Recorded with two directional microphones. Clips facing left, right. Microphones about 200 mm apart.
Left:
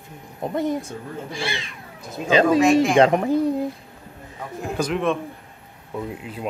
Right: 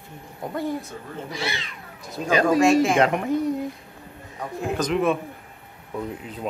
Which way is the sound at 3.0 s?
35° left (ahead or behind).